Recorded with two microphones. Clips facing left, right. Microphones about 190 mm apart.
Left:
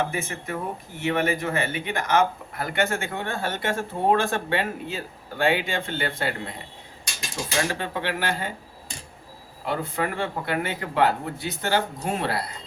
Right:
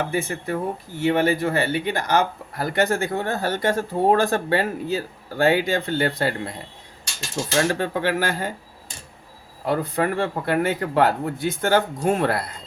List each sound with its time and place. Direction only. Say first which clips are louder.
0.1 s speech: right 5 dB; 35° right (ahead or behind)
7.7 s a man's voice: right 6 dB; 45° right (ahead or behind)
9.6 s a man's voice: right 5 dB; 40° right (ahead or behind)